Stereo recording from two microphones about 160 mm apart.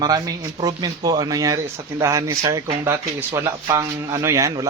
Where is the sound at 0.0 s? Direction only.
25° right (ahead or behind).